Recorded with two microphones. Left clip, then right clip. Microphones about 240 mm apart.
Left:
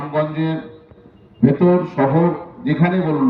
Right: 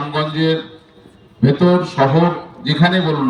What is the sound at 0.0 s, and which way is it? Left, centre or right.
Music, right.